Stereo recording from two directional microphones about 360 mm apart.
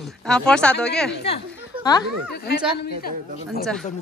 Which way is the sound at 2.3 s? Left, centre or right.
Left.